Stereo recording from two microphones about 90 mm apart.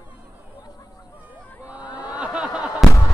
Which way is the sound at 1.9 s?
50° left (ahead or behind).